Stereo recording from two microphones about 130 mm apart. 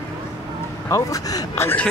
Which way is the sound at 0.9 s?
25° left (ahead or behind).